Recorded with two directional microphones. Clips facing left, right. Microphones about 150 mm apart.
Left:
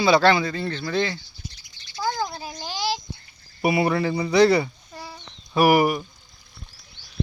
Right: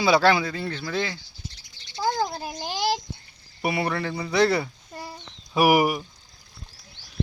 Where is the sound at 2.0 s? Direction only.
30° right (ahead or behind).